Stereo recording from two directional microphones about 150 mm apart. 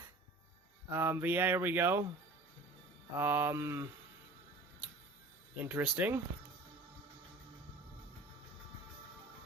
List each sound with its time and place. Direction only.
0.9 s speech: 15° right (ahead or behind)
3.2 s speech: 15° right (ahead or behind)
5.6 s speech: 10° right (ahead or behind)